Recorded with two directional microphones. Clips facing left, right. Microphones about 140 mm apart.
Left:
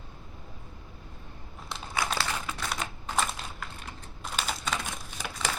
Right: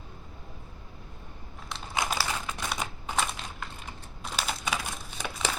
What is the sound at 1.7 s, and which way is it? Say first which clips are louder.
Crumpling: left 1 dB; centre (ahead or behind).